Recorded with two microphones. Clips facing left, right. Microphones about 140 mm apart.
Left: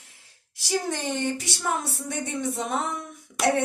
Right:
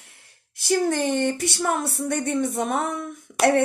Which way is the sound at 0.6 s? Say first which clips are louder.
Right 6 dB; 55° right (ahead or behind).